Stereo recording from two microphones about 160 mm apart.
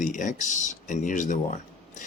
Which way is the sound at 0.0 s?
50° left (ahead or behind).